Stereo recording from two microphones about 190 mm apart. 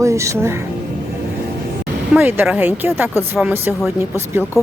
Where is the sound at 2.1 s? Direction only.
10° right (ahead or behind).